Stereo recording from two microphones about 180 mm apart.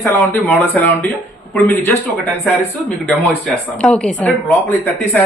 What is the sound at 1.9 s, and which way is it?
Speech, 10° left (ahead or behind).